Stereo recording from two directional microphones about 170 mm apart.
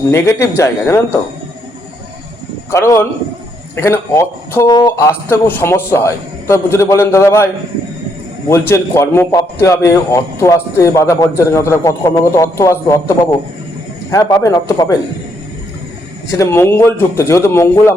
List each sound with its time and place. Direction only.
0.1 s speech: 15° left (ahead or behind)
2.6 s a man's voice: 15° left (ahead or behind)
8.7 s a man's voice: 15° left (ahead or behind)
16.3 s speech: 15° left (ahead or behind)